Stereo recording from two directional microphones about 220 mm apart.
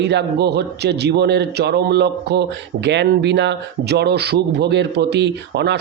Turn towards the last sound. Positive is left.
turn(degrees=-50)  # may be behind; listen again after turning